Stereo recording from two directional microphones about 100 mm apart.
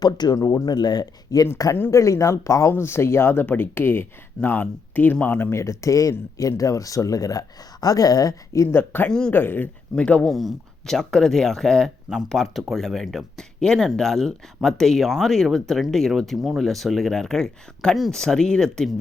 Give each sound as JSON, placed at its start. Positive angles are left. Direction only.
{"t": 0.0, "sound": "speech", "side_deg": 45}
{"t": 5.5, "sound": "speech", "side_deg": 30}
{"t": 8.6, "sound": "speech", "side_deg": 25}
{"t": 9.0, "sound": "speech", "side_deg": 5}
{"t": 9.3, "sound": "speech", "side_deg": 20}